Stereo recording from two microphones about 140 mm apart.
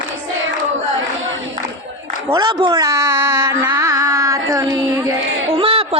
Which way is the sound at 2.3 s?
30° right (ahead or behind).